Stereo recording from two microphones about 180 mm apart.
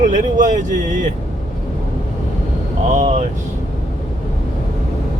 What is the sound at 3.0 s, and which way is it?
Speech, 45° right (ahead or behind).